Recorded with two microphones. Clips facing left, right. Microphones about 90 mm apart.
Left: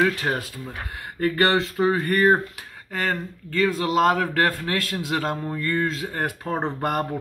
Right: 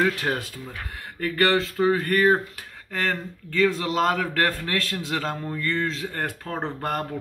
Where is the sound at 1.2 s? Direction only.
20° left (ahead or behind).